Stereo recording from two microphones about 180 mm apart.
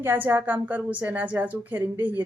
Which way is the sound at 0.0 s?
10° right (ahead or behind).